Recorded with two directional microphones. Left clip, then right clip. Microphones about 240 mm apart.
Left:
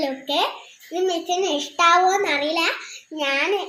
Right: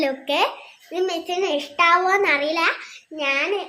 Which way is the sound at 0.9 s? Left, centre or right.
Centre.